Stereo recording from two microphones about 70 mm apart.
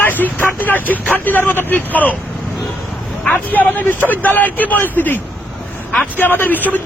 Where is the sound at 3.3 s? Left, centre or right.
Left.